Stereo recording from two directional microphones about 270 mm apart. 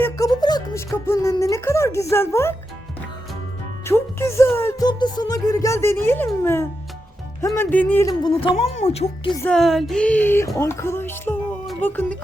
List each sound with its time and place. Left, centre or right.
0.0 s speech: centre
3.8 s music: centre
9.4 s music: centre